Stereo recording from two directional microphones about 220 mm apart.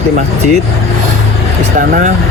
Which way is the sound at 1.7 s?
35° right (ahead or behind).